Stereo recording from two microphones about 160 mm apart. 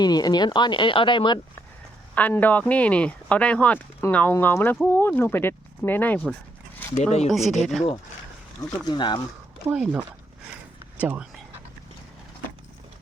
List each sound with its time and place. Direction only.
0.0 s speech: 25° left (ahead or behind)
2.1 s speech: 10° left (ahead or behind)
6.9 s speech: 45° left (ahead or behind)
7.3 s speech: centre (ahead or behind)
8.9 s speech: 25° left (ahead or behind)
9.6 s speech: 10° right (ahead or behind)